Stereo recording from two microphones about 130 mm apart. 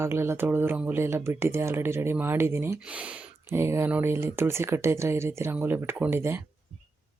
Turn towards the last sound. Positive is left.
turn(degrees=-15)  # may be behind; listen again after turning